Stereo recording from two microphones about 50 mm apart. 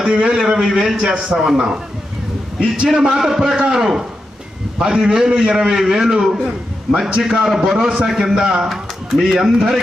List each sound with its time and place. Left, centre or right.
0.1 s a man's voice: right
8.7 s speech: centre